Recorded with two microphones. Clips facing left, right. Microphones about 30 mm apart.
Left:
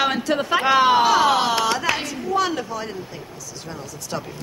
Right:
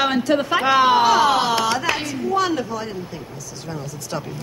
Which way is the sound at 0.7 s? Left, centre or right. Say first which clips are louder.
Right 1 dB; right.